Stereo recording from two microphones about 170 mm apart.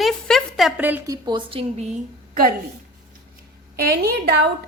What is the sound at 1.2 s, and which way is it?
Speech, 30° right (ahead or behind).